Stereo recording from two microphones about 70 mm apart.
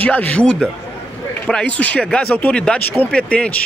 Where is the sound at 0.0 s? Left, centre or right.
Left.